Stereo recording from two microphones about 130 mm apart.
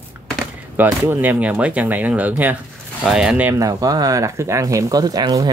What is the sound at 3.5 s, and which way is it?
Speech, 25° right (ahead or behind).